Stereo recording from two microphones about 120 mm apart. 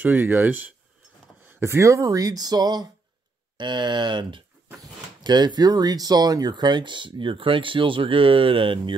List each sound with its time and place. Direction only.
0.0 s speech: 15° right (ahead or behind); by 8.9 s 45° right (ahead or behind)